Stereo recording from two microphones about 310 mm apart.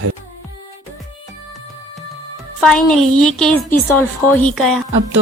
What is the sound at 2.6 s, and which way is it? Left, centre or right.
A woman's voice, centre.